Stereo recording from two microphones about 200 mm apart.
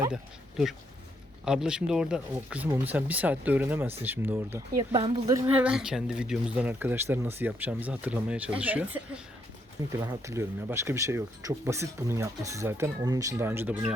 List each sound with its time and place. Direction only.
1.5 s speech: 5° right (ahead or behind)
4.9 s speech: 25° right (ahead or behind); by 9.0 s 10° right (ahead or behind)
10.0 s speech: 15° right (ahead or behind)